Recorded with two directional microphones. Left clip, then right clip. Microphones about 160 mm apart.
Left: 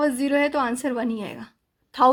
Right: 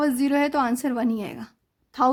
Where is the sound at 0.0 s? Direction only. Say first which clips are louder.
Left 1 dB; 45° right (ahead or behind).